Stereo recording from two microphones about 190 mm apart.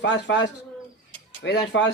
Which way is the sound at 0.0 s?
70° left (ahead or behind).